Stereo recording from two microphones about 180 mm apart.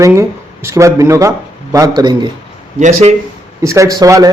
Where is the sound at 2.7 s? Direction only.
40° right (ahead or behind).